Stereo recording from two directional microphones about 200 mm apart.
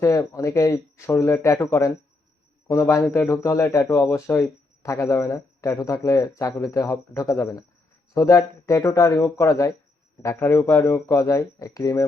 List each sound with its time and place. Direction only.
0.0 s a man's voice: 15° left (ahead or behind)